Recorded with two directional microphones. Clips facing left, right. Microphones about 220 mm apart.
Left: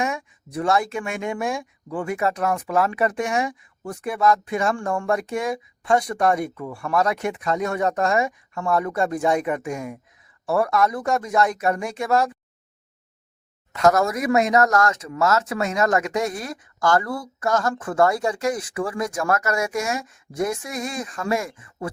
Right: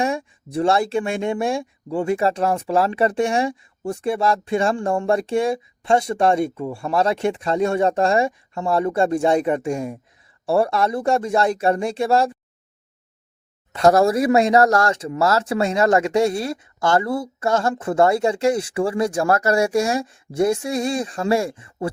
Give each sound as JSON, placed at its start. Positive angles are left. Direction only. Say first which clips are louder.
{"t": 0.0, "sound": "speech", "louder": "right 4 dB", "side_deg": -30}
{"t": 13.7, "sound": "speech", "louder": "right 4 dB", "side_deg": -30}